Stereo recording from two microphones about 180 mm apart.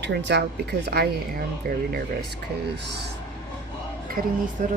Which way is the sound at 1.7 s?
55° right (ahead or behind).